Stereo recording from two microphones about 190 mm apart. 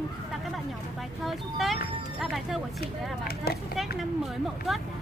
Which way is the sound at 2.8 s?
55° left (ahead or behind).